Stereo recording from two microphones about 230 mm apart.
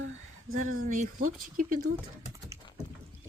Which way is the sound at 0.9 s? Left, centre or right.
Right.